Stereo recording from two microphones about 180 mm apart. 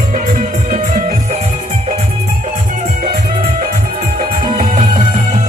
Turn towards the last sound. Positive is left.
turn(degrees=-45)  # may be behind; listen again after turning